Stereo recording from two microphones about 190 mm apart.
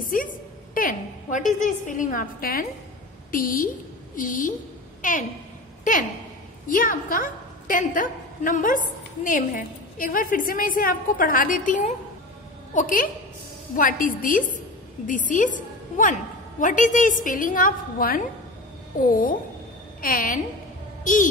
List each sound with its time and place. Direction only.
0.0 s a sound: 45° left (ahead or behind)
1.6 s a woman's voice: 40° left (ahead or behind)
20.0 s a woman's voice: 45° left (ahead or behind)